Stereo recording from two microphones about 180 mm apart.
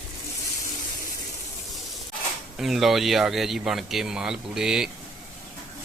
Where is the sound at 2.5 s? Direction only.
Centre (ahead or behind).